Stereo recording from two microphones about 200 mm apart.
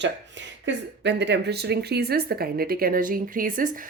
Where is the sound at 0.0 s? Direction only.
65° right (ahead or behind).